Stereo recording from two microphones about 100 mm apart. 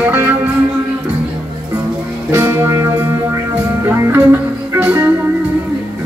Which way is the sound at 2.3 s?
25° right (ahead or behind).